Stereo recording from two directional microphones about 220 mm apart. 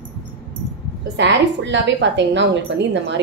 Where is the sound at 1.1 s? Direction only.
55° right (ahead or behind).